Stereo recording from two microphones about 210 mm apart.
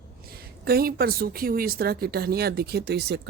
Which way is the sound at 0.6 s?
45° right (ahead or behind).